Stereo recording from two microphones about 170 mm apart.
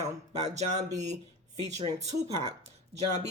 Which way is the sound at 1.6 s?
45° right (ahead or behind).